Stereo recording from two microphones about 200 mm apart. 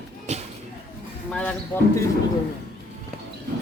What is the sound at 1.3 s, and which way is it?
Speech, 5° left (ahead or behind).